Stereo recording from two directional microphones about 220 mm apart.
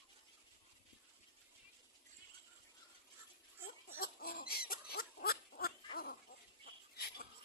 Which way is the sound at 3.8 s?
40° left (ahead or behind).